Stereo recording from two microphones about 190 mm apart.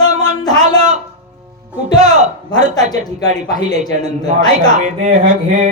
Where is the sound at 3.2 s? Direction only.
20° left (ahead or behind).